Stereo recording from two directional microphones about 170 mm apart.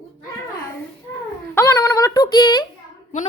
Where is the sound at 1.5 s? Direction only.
15° left (ahead or behind).